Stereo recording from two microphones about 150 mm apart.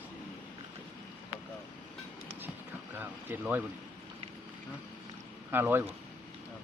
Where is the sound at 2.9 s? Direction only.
15° right (ahead or behind).